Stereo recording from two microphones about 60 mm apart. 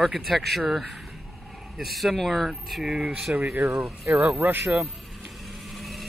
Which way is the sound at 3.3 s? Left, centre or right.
Right.